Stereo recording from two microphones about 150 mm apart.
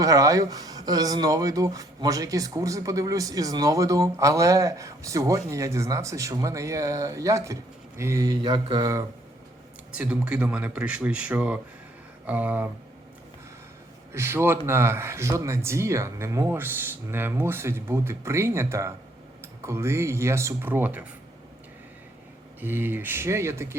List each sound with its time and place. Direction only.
0.0 s speech: 20° right (ahead or behind)
10.0 s speech: 5° right (ahead or behind)
14.1 s speech: 15° right (ahead or behind)
22.6 s speech: 15° right (ahead or behind)